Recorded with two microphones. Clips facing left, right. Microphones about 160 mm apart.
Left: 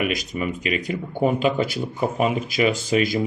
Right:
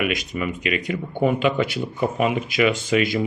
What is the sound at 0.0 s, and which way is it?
Speech, 40° left (ahead or behind).